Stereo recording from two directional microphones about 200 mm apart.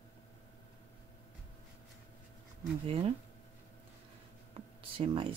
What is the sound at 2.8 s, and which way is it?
Speech, 25° right (ahead or behind).